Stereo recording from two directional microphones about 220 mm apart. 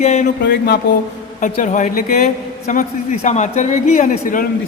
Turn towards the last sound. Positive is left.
turn(degrees=35)  # may be behind; listen again after turning